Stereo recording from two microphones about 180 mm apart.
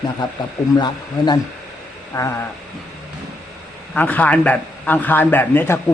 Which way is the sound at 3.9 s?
10° left (ahead or behind).